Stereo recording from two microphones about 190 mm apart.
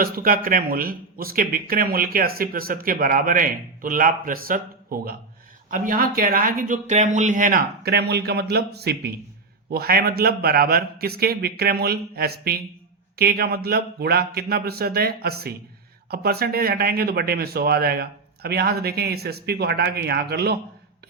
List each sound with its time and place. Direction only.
0.0 s speech: 50° right (ahead or behind)